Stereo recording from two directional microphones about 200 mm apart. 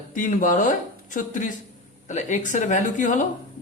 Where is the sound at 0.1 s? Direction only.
40° left (ahead or behind).